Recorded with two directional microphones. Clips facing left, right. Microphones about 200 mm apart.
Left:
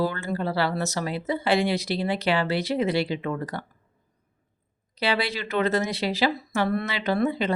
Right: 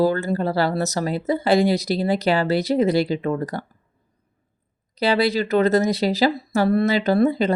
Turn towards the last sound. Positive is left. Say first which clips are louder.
# right 6 dB
turn(degrees=-40)  # may be behind; listen again after turning